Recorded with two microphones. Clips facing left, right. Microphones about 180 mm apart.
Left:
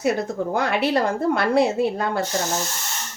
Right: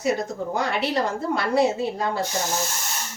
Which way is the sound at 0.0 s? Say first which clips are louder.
Left 2 dB; 60° left (ahead or behind).